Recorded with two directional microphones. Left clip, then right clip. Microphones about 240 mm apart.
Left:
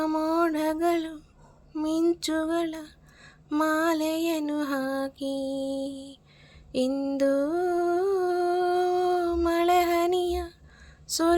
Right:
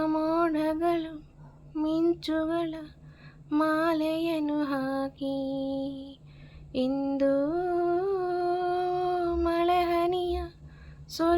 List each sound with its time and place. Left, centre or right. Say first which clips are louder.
0.0 s mantra: left 1 dB; left
1.7 s a sound: left 1 dB; left
3.5 s lullaby: left 1 dB; left
6.7 s humming: left 2 dB; left
11.1 s speech: left 2 dB; left